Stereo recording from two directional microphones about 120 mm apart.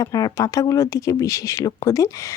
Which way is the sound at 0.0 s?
30° left (ahead or behind).